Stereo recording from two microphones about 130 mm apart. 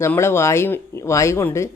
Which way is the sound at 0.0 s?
20° left (ahead or behind).